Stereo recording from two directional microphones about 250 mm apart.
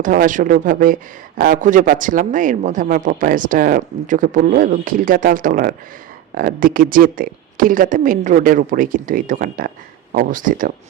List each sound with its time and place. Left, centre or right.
0.0 s speech: right